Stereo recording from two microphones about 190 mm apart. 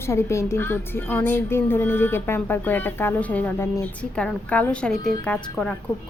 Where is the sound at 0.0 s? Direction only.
15° left (ahead or behind).